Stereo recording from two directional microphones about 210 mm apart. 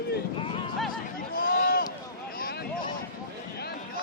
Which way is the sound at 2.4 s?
50° left (ahead or behind).